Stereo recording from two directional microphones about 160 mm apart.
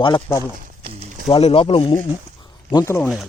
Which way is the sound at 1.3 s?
35° left (ahead or behind).